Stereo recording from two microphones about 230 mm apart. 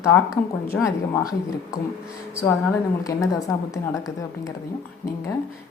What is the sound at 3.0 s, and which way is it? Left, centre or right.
A woman's voice, centre.